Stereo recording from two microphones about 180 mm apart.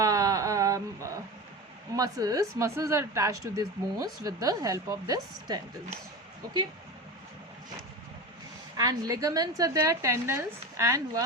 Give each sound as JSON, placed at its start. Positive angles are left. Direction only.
{"t": 0.0, "sound": "a sound", "side_deg": -20}
{"t": 2.0, "sound": "speech", "side_deg": -20}
{"t": 8.8, "sound": "speech", "side_deg": -20}